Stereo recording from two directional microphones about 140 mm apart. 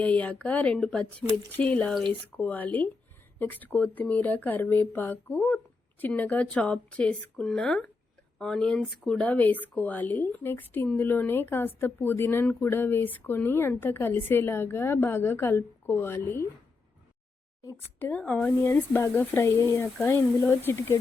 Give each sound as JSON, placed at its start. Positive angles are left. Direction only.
{"t": 0.0, "sound": "speech", "side_deg": 10}
{"t": 17.6, "sound": "speech", "side_deg": 25}
{"t": 18.0, "sound": "speech", "side_deg": 10}